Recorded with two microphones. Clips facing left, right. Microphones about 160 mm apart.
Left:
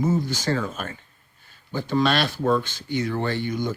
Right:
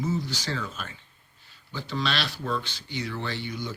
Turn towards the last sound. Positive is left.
turn(degrees=50)  # may be behind; listen again after turning